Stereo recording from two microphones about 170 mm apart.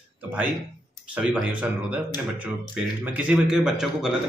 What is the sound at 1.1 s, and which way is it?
A man's voice, 5° right (ahead or behind).